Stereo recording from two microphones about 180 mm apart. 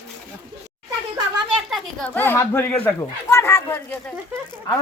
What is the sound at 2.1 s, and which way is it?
Speech, 10° left (ahead or behind).